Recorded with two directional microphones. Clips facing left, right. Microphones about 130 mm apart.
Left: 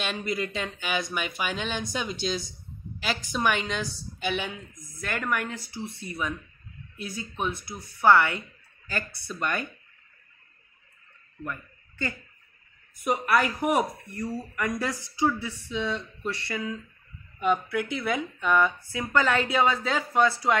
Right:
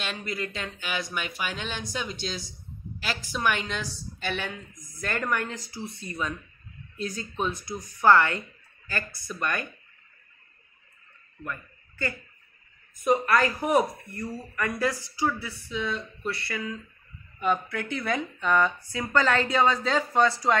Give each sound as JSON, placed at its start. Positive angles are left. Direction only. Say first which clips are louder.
{"t": 0.3, "sound": "speech", "louder": "left 3 dB", "side_deg": 5}
{"t": 11.4, "sound": "a man's voice", "louder": "left 1 dB", "side_deg": 20}